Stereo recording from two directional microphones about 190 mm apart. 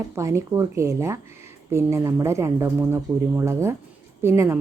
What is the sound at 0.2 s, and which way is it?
A woman's voice, 15° right (ahead or behind).